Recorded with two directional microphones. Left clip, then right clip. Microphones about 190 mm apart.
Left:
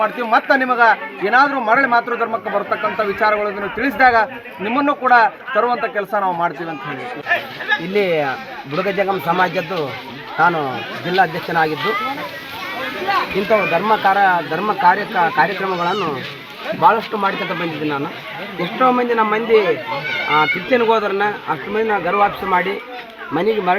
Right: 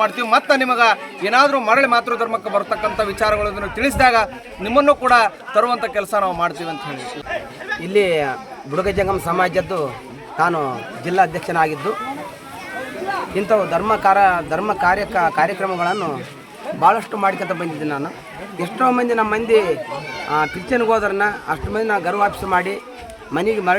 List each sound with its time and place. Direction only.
0.0 s a man's voice: 20° right (ahead or behind)
7.9 s a man's voice: 15° right (ahead or behind)
13.5 s speech: 10° right (ahead or behind)
18.8 s speech: 10° right (ahead or behind)